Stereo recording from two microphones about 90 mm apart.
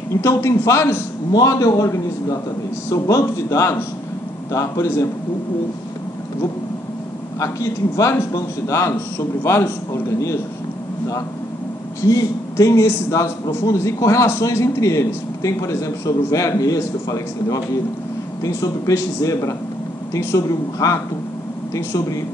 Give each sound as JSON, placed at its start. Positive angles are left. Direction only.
{"t": 0.1, "sound": "a man's voice", "side_deg": 30}
{"t": 7.3, "sound": "a man's voice", "side_deg": 35}
{"t": 12.0, "sound": "a man's voice", "side_deg": 40}